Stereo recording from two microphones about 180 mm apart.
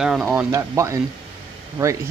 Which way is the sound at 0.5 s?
15° right (ahead or behind).